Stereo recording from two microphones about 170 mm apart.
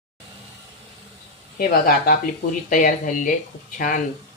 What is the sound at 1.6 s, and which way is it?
Speech, 60° left (ahead or behind).